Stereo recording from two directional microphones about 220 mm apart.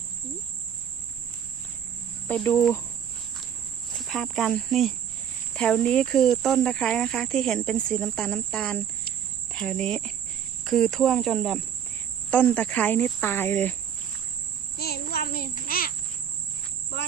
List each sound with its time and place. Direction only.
2.2 s speech: 5° left (ahead or behind)
3.9 s speech: centre (ahead or behind)
14.8 s child singing: 45° left (ahead or behind)